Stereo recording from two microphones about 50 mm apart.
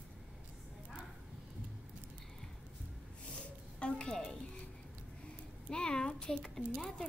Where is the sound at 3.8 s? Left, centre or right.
Centre.